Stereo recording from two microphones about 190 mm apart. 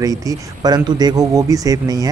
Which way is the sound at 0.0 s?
20° right (ahead or behind).